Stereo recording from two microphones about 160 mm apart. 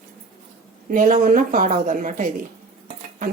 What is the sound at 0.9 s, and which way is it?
A woman's voice, 60° right (ahead or behind).